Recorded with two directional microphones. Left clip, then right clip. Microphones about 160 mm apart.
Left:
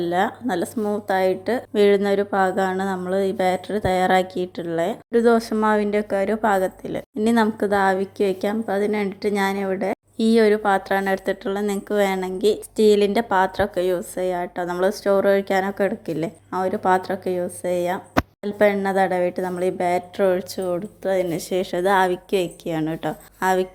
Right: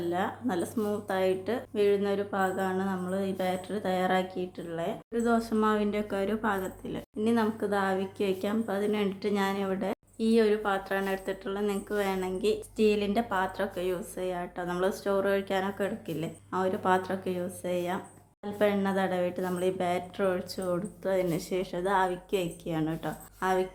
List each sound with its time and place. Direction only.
0.0 s a woman's voice: 40° left (ahead or behind)
1.7 s a woman's voice: 50° left (ahead or behind); by 10.0 s 30° left (ahead or behind)
10.2 s a woman's voice: 45° left (ahead or behind); by 23.6 s 30° left (ahead or behind)